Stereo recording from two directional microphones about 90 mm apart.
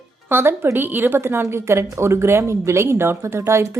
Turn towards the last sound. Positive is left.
turn(degrees=-30)  # may be behind; listen again after turning